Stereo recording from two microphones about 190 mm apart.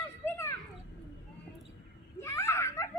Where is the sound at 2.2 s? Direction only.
15° left (ahead or behind).